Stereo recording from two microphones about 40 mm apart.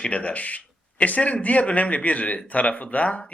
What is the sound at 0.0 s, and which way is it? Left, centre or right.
Speech, left.